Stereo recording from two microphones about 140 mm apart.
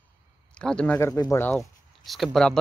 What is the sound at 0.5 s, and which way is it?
Speech, 5° left (ahead or behind).